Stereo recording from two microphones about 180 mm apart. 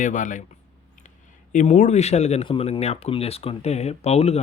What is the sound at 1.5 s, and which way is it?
Speech, 45° left (ahead or behind).